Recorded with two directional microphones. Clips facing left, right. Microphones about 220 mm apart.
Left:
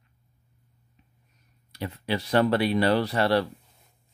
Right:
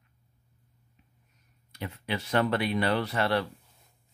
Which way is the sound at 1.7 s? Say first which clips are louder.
Left 4 dB; 35° left (ahead or behind).